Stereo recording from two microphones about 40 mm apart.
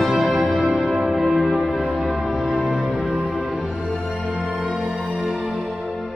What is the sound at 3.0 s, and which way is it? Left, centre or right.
Music, right.